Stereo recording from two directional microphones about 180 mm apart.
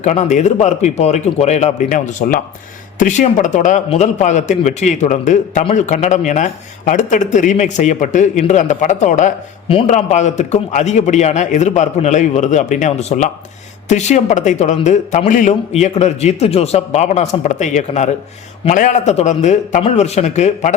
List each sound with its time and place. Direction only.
0.0 s a man's voice: 40° left (ahead or behind)